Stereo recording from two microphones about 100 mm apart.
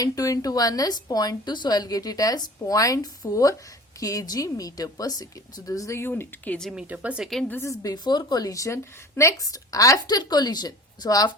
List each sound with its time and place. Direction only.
0.0 s a woman's voice: 40° left (ahead or behind); by 6.6 s 20° left (ahead or behind)
6.6 s speech: 5° right (ahead or behind)
6.8 s speech: 15° right (ahead or behind)
7.6 s a woman's voice: 35° left (ahead or behind)